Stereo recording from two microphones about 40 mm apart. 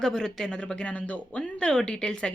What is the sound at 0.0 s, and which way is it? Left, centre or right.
Speech, centre.